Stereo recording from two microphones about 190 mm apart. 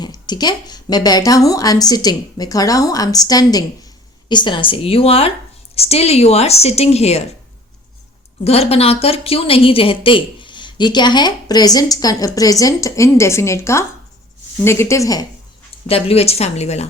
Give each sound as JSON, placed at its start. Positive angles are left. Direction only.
{"t": 0.0, "sound": "a woman's voice", "side_deg": 20}
{"t": 8.4, "sound": "a woman's voice", "side_deg": 30}
{"t": 15.9, "sound": "speech", "side_deg": 30}